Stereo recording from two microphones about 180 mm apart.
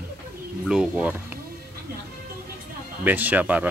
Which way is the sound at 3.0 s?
10° right (ahead or behind).